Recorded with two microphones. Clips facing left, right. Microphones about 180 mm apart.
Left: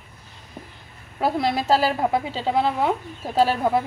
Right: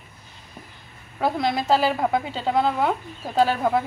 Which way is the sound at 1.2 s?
5° left (ahead or behind).